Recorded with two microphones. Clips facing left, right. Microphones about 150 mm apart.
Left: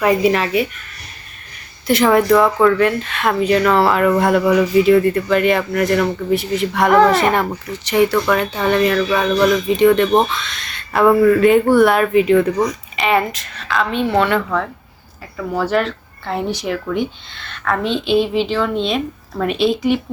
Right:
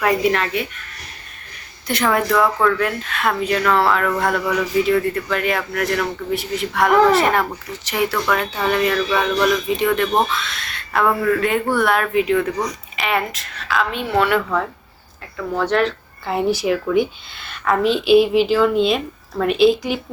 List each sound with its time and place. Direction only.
0.0 s speech: centre (ahead or behind)
1.9 s speech: centre (ahead or behind)